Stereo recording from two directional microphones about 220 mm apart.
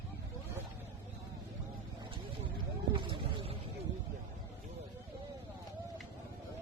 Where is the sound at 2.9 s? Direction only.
20° right (ahead or behind).